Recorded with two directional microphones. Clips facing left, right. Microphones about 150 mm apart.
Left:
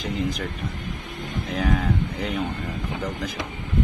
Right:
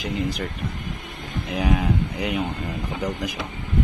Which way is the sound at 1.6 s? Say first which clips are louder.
Right 1 dB; 10° right (ahead or behind).